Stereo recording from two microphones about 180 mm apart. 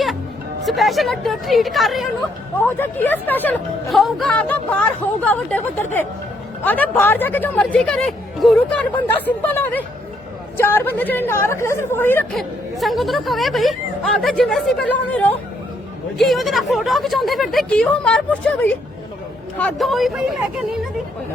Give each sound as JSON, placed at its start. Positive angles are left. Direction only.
{"t": 0.6, "sound": "speech", "side_deg": 0}
{"t": 2.6, "sound": "speech", "side_deg": 10}
{"t": 12.3, "sound": "speech", "side_deg": 0}